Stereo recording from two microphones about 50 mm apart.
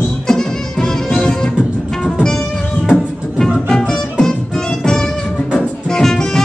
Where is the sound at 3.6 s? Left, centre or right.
Centre.